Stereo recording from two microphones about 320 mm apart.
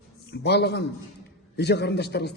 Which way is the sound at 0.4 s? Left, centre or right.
Left.